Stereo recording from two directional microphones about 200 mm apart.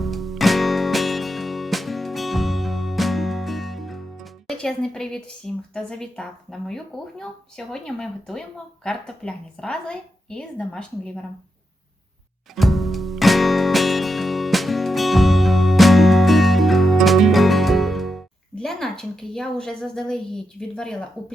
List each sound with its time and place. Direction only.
0.0 s music: centre (ahead or behind)
5.7 s speech: 5° left (ahead or behind)
12.5 s music: centre (ahead or behind)